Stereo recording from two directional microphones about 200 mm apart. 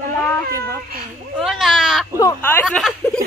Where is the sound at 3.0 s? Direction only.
10° left (ahead or behind).